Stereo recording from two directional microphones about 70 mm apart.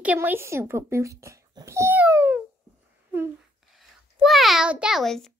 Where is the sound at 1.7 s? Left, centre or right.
Right.